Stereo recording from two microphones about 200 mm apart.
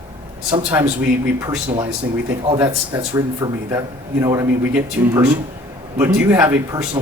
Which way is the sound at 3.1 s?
15° right (ahead or behind).